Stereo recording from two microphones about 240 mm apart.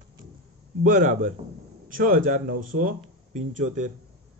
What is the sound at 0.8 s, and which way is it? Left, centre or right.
Speech, right.